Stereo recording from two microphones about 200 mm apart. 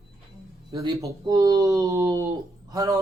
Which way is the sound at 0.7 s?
20° right (ahead or behind).